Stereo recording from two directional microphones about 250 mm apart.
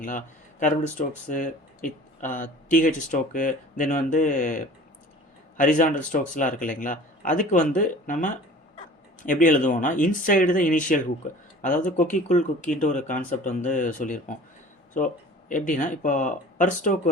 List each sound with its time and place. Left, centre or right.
0.0 s speech: left